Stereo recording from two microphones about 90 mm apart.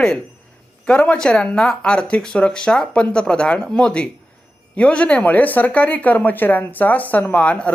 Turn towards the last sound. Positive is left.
turn(degrees=15)  # may be behind; listen again after turning